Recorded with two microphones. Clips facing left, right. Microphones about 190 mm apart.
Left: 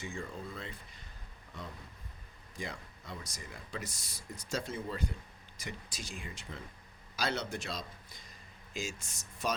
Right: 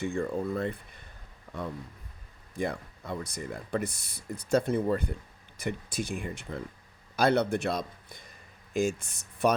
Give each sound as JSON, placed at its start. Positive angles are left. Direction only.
{"t": 0.0, "sound": "speech", "side_deg": -60}
{"t": 1.5, "sound": "a sound", "side_deg": -90}
{"t": 2.6, "sound": "speech", "side_deg": -55}